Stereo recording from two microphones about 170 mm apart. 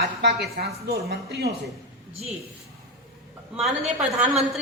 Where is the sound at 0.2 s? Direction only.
75° right (ahead or behind).